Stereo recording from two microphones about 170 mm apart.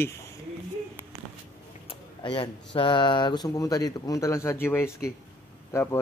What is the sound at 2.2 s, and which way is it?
Speech, 30° left (ahead or behind).